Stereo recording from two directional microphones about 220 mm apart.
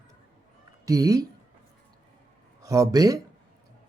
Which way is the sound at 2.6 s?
15° right (ahead or behind).